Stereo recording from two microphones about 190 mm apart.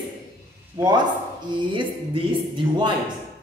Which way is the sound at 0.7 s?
20° right (ahead or behind).